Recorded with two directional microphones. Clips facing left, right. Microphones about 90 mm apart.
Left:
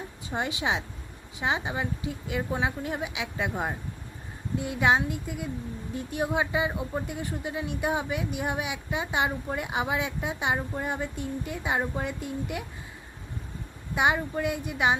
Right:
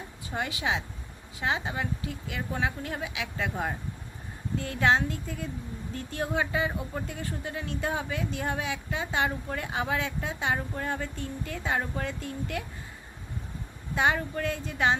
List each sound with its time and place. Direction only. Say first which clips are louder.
0.3 s speech: left 2 dB; 20° left (ahead or behind)
13.9 s speech: left 1 dB; 15° left (ahead or behind)